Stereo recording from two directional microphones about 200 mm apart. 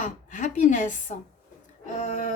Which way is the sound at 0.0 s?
40° left (ahead or behind).